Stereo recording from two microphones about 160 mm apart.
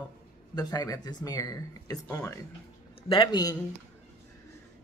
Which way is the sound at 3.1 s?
30° left (ahead or behind).